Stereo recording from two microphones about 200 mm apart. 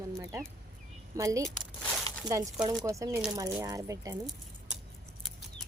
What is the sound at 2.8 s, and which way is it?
Speech, 15° right (ahead or behind).